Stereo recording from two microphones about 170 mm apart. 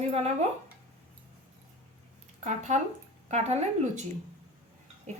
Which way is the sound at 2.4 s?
45° right (ahead or behind).